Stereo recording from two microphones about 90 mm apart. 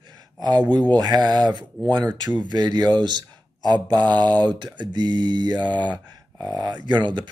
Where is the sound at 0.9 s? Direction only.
50° right (ahead or behind).